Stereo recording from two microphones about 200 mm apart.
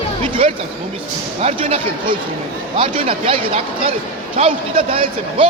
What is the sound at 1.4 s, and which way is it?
A man's voice, 30° right (ahead or behind).